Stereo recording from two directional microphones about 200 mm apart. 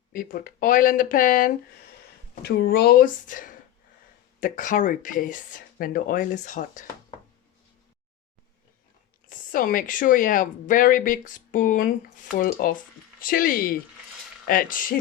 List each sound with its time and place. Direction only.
0.1 s speech: 45° left (ahead or behind)
9.3 s speech: 45° left (ahead or behind)